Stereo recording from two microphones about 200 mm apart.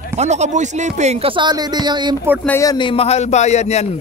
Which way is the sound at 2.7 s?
25° left (ahead or behind).